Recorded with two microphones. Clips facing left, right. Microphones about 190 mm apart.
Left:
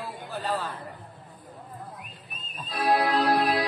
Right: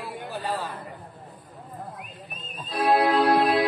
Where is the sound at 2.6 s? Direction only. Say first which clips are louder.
Right 3 dB; 25° right (ahead or behind).